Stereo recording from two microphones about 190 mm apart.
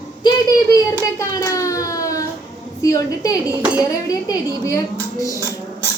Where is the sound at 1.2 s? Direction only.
15° left (ahead or behind).